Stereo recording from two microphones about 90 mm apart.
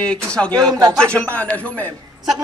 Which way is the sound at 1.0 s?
15° left (ahead or behind).